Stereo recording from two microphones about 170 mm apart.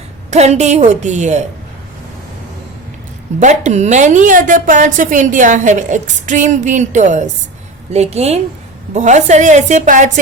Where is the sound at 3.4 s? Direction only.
45° right (ahead or behind).